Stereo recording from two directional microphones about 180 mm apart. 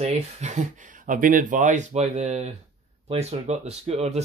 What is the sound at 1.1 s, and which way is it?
Speech, 50° right (ahead or behind).